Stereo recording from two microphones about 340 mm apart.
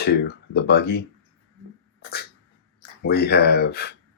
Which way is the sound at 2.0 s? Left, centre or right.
Left.